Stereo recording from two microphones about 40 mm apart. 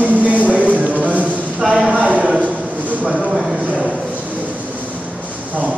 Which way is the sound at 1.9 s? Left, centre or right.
Right.